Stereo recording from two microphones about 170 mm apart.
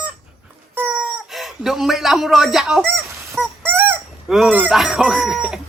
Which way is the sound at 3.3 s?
10° right (ahead or behind).